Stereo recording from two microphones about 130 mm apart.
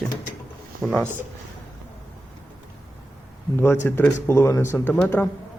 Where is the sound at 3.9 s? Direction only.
15° left (ahead or behind).